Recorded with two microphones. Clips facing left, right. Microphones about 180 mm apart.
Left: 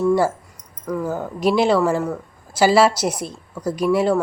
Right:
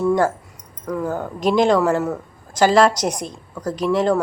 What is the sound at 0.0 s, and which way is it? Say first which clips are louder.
Speech: even; 5° left (ahead or behind).